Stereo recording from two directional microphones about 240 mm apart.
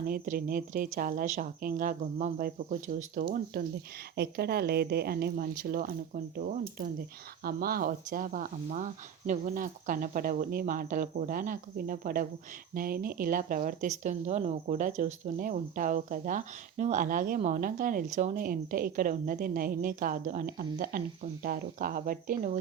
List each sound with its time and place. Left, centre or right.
0.0 s speech: right